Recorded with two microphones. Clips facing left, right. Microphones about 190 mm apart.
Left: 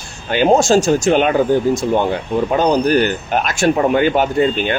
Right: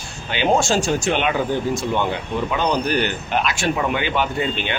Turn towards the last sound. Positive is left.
turn(degrees=45)  # may be behind; listen again after turning